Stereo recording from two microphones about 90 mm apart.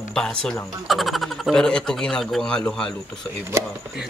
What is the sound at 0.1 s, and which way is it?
Speech, 5° left (ahead or behind).